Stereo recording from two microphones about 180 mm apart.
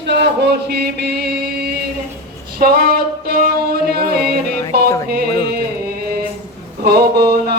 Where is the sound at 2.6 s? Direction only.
55° right (ahead or behind).